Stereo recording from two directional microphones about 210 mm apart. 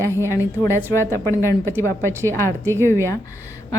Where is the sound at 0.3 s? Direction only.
15° left (ahead or behind).